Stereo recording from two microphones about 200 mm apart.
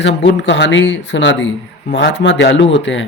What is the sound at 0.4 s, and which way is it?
Speech, 65° left (ahead or behind).